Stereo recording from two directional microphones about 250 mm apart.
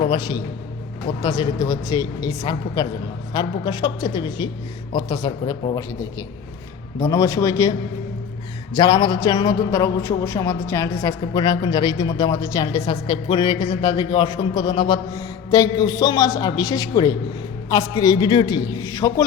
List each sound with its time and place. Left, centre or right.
0.1 s speech: centre
7.0 s speech: centre
8.7 s speech: centre